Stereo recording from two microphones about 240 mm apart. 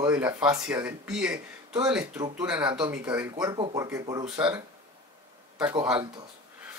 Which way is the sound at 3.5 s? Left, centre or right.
Centre.